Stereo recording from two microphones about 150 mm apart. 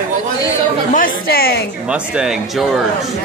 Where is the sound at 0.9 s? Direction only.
75° left (ahead or behind).